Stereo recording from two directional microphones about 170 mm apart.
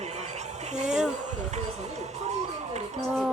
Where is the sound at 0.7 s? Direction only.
40° right (ahead or behind).